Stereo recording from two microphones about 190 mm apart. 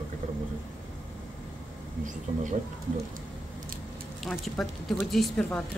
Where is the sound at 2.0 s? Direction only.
40° right (ahead or behind).